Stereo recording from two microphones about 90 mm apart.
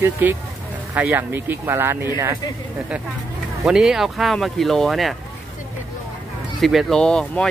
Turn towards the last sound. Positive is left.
turn(degrees=10)  # may be behind; listen again after turning